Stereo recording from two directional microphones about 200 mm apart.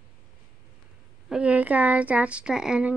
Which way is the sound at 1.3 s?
5° right (ahead or behind).